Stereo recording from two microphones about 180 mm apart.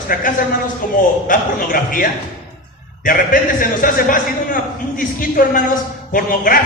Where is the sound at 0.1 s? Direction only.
50° left (ahead or behind).